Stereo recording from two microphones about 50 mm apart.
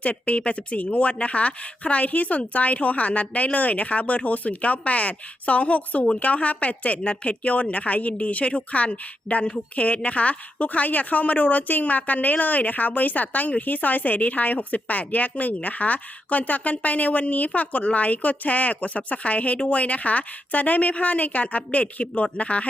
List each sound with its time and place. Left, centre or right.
0.0 s speech: left